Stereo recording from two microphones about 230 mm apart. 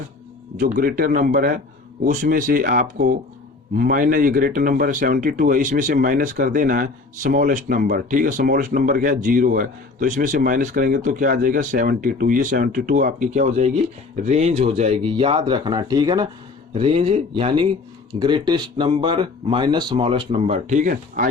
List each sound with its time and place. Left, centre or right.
0.5 s speech: right